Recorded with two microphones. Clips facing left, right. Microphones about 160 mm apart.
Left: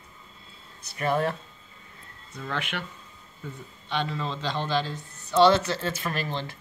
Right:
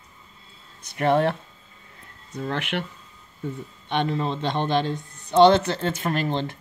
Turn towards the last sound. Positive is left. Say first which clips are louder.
# right 5 dB
turn(degrees=-55)  # may be behind; listen again after turning